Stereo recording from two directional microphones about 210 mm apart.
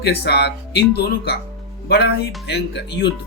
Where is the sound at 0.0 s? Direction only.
50° left (ahead or behind).